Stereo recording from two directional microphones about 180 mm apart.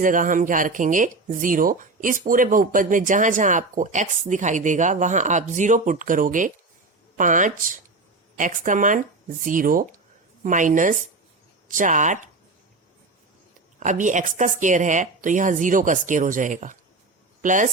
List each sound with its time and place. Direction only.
0.0 s speech: 45° right (ahead or behind)
13.7 s speech: 45° right (ahead or behind)